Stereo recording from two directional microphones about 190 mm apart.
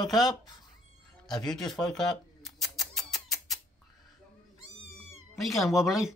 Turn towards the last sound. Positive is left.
turn(degrees=0)  # may be behind; listen again after turning